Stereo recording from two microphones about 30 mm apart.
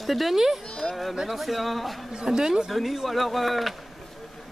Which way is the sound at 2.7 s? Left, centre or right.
Centre.